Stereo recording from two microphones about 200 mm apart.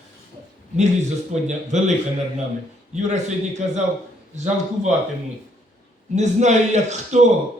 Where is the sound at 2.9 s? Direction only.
35° right (ahead or behind).